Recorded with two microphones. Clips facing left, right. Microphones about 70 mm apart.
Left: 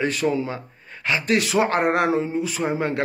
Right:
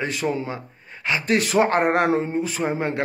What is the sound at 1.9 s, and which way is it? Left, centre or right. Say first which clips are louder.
Speech: right 1 dB; right.